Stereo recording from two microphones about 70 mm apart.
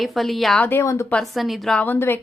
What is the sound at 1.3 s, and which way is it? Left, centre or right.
Speech, centre.